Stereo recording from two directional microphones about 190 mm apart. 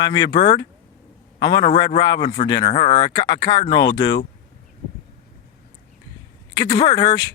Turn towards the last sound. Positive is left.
turn(degrees=25)  # may be behind; listen again after turning